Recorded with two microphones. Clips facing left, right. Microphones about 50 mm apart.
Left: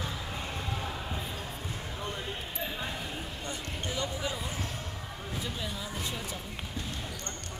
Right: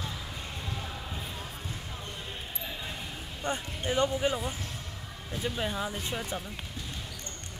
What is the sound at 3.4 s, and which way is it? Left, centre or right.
Speech, right.